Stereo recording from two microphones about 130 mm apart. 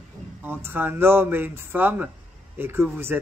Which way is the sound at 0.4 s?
15° right (ahead or behind).